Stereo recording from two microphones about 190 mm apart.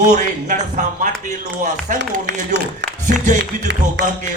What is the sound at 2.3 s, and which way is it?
Speech, 65° right (ahead or behind).